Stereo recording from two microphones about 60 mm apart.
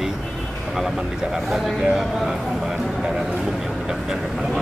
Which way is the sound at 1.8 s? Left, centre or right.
Centre.